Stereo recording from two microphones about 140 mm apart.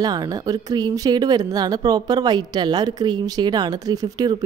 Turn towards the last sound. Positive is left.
turn(degrees=-25)  # may be behind; listen again after turning